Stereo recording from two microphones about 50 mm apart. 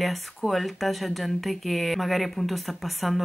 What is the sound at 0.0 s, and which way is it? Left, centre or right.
Speech, centre.